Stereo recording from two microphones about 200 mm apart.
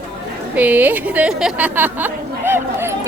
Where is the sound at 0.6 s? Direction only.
10° right (ahead or behind).